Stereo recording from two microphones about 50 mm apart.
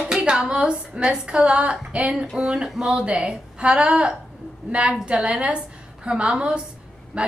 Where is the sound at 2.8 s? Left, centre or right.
Centre.